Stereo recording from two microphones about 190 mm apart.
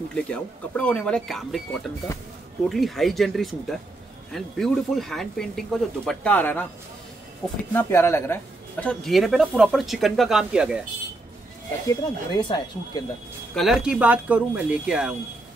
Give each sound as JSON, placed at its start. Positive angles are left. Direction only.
{"t": 0.1, "sound": "speech", "side_deg": 5}
{"t": 7.7, "sound": "speech", "side_deg": 10}
{"t": 11.9, "sound": "speech", "side_deg": 25}
{"t": 13.6, "sound": "speech", "side_deg": 0}